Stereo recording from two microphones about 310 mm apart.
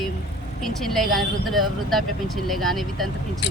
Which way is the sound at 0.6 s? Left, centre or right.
Centre.